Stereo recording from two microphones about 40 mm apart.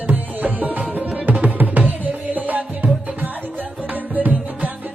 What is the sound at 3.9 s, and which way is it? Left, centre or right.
Music, right.